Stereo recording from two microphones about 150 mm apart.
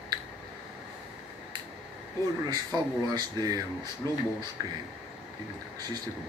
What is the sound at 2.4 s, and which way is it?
Speech, 25° right (ahead or behind).